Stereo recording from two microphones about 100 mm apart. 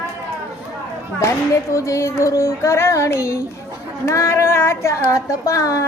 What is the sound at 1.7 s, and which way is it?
Speech, 30° left (ahead or behind).